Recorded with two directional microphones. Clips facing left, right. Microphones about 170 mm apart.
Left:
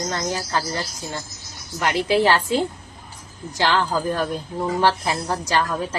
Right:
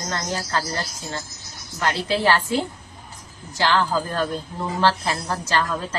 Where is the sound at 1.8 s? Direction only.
15° left (ahead or behind).